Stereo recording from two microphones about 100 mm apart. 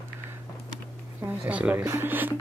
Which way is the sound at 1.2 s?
15° right (ahead or behind).